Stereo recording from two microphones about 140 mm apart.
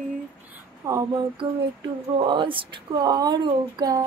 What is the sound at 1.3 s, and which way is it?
Speech, 35° right (ahead or behind).